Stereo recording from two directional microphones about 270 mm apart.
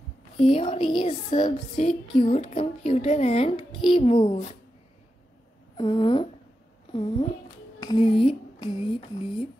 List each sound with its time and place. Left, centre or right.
0.5 s child singing: left
5.8 s child singing: centre
6.9 s speech: centre
7.8 s child singing: centre